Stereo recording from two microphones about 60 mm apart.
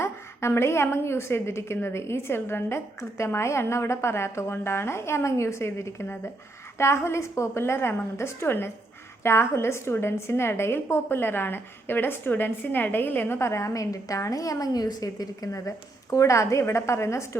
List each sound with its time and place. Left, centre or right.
0.0 s a woman's voice: left
13.4 s a woman's voice: left